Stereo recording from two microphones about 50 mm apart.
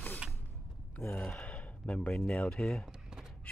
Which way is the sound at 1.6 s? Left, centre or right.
Left.